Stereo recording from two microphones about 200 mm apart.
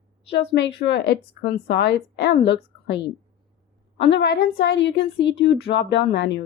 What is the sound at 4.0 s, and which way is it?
A woman's voice, 60° left (ahead or behind).